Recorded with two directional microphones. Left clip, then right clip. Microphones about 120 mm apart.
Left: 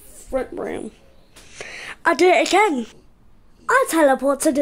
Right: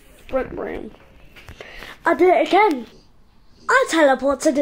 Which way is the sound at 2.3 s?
85° left.